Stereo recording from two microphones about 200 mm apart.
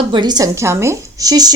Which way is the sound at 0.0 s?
25° right (ahead or behind).